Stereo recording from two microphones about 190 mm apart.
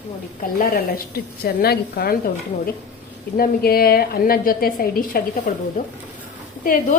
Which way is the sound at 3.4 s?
55° left (ahead or behind).